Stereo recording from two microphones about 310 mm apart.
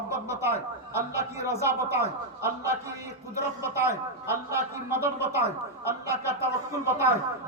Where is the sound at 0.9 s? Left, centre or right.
Centre.